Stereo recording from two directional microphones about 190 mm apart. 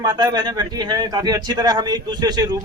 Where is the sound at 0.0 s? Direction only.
20° right (ahead or behind).